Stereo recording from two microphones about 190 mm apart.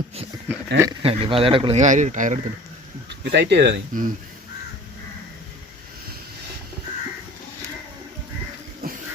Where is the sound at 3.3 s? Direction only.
60° right (ahead or behind).